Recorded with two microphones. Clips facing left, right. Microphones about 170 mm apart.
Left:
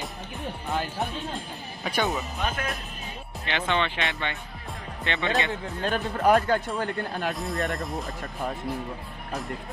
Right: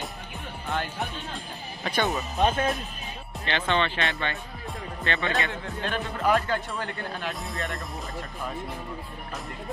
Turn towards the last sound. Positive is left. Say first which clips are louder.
# left 5 dB
turn(degrees=0)  # may be behind; listen again after turning